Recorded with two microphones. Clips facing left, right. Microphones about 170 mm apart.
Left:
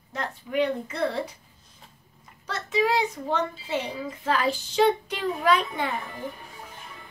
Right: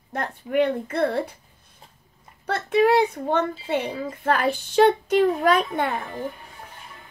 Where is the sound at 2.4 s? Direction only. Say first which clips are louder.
Right 6 dB; 55° right (ahead or behind).